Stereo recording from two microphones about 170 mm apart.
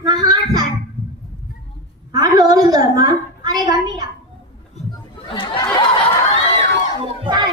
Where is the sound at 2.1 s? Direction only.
25° right (ahead or behind).